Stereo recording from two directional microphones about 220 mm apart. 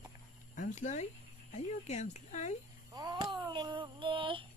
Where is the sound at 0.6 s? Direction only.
35° left (ahead or behind).